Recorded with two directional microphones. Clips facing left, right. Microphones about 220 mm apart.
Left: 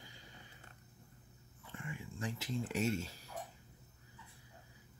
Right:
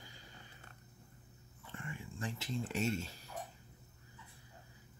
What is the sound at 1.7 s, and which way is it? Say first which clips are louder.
Speech: even; 10° left (ahead or behind).